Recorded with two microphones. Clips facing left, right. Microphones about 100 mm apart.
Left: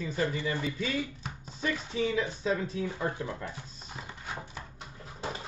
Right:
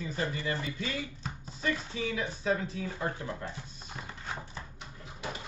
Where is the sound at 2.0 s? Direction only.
30° left (ahead or behind).